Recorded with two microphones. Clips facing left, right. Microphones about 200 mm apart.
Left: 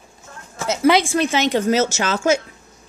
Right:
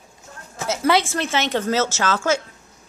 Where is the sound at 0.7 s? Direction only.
15° left (ahead or behind).